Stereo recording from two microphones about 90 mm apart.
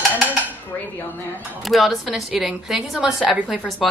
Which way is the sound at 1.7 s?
Centre (ahead or behind).